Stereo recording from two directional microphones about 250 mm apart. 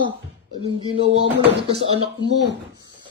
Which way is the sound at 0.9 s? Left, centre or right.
Right.